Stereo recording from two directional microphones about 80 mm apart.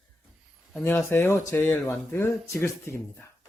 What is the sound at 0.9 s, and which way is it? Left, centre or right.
Speech, left.